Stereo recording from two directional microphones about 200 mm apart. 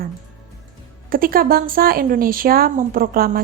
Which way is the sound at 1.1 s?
45° right (ahead or behind).